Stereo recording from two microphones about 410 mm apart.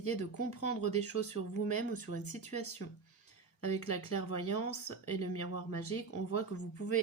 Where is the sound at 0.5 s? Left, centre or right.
Left.